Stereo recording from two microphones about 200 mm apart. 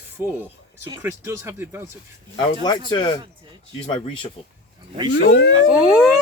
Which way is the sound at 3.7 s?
25° left (ahead or behind).